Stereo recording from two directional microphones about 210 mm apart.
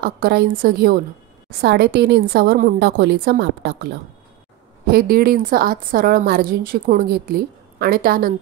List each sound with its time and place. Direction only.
0.0 s a woman's voice: 45° right (ahead or behind)